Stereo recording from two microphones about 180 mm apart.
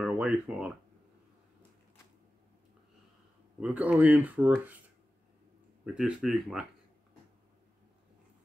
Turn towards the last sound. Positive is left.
turn(degrees=0)  # may be behind; listen again after turning